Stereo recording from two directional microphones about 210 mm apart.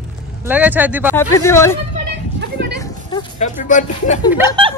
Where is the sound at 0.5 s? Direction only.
10° right (ahead or behind).